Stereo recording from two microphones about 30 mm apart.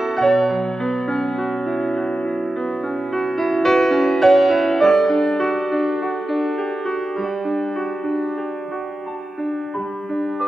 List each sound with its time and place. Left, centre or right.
0.2 s music: centre
3.2 s music: centre
4.6 s music: centre
5.4 s music: centre